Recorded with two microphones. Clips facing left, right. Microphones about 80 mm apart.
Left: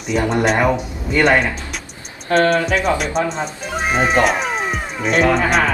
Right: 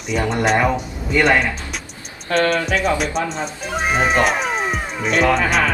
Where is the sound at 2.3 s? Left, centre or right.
Left.